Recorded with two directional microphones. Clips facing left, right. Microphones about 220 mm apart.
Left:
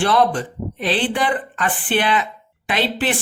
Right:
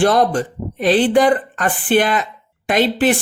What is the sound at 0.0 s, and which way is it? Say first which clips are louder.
A woman's voice: right 3 dB; 45° right (ahead or behind).